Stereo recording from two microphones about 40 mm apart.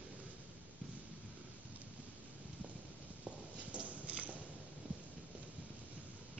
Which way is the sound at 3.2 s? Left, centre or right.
Right.